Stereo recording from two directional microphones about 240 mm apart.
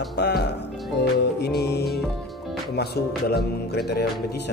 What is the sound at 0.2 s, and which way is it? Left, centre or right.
Music, left.